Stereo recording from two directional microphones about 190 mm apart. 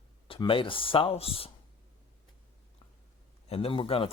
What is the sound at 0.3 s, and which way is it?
Speech, 25° left (ahead or behind).